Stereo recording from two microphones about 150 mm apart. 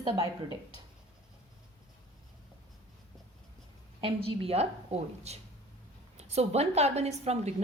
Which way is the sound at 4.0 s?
40° right (ahead or behind).